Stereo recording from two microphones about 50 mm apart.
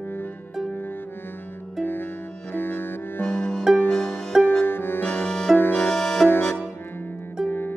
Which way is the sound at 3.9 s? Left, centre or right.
Left.